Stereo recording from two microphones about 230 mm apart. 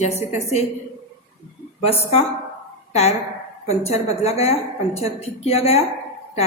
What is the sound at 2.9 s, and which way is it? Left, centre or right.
A woman's voice, left.